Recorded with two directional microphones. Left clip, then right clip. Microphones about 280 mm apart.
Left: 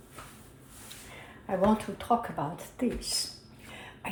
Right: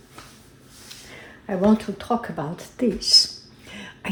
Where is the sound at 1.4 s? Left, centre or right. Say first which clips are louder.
Right 5 dB; right.